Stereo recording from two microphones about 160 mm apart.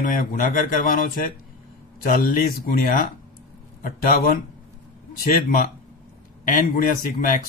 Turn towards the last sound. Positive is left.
turn(degrees=60)  # may be behind; listen again after turning